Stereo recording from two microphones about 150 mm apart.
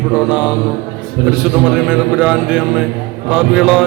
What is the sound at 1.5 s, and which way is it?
A man's voice, 5° right (ahead or behind).